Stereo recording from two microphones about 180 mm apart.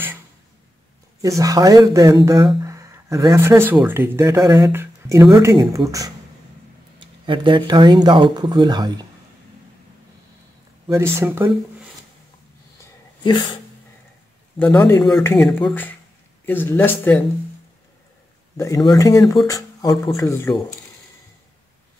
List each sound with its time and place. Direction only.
1.2 s speech: 20° right (ahead or behind)
10.9 s speech: 15° right (ahead or behind)
12.8 s a sound: 25° left (ahead or behind)
14.6 s speech: 10° left (ahead or behind)
16.4 s speech: 10° left (ahead or behind)
18.9 s speech: 20° left (ahead or behind)